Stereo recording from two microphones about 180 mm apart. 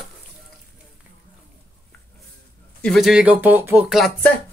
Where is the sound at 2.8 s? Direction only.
Centre (ahead or behind).